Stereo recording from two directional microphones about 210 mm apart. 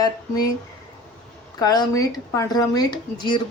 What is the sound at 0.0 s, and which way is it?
Speech, 20° left (ahead or behind).